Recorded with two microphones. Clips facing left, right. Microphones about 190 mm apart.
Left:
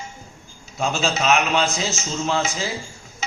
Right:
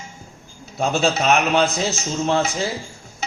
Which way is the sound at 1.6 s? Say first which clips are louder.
Right 3 dB; 55° right (ahead or behind).